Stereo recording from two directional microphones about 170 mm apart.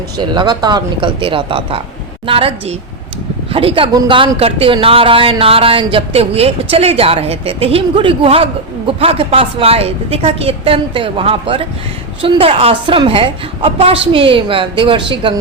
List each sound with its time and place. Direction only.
0.2 s speech: 25° right (ahead or behind)